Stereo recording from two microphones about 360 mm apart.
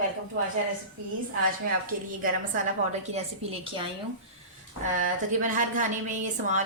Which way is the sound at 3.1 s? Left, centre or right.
Centre.